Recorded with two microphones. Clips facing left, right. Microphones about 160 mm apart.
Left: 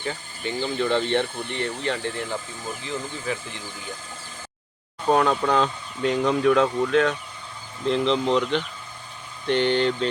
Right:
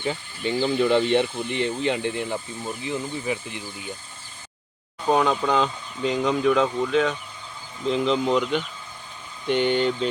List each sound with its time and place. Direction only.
0.0 s speech: 15° right (ahead or behind)
5.0 s speech: centre (ahead or behind)